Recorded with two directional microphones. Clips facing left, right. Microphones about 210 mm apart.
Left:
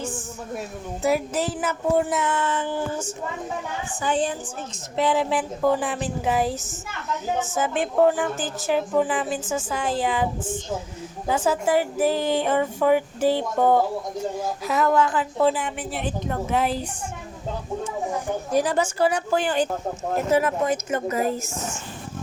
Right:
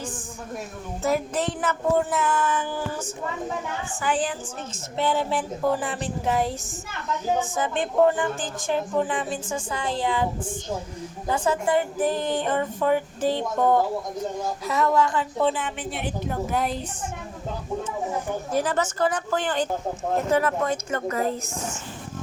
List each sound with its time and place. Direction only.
1.0 s a woman's voice: 5° left (ahead or behind); by 2.7 s 25° left (ahead or behind)
4.0 s a woman's voice: 25° left (ahead or behind)
4.9 s speech: centre (ahead or behind)
11.3 s a woman's voice: 5° left (ahead or behind)
14.6 s speech: centre (ahead or behind)
16.0 s speech: 5° right (ahead or behind)
18.5 s a woman's voice: 15° left (ahead or behind)